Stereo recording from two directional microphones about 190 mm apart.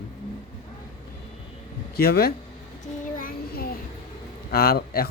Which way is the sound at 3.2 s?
50° left (ahead or behind).